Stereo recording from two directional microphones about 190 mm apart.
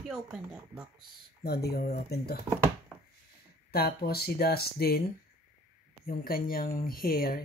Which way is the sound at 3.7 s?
55° left (ahead or behind).